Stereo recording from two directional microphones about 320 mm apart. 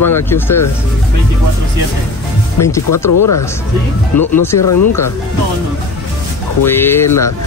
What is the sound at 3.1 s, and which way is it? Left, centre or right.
Speech, left.